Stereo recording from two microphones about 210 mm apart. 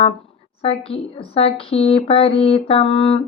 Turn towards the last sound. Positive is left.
turn(degrees=25)  # may be behind; listen again after turning